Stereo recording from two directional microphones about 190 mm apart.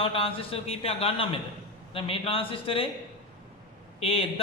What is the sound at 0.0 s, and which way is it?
A man's voice, 30° left (ahead or behind).